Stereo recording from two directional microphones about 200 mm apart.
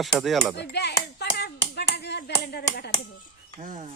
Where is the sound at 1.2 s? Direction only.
55° left (ahead or behind).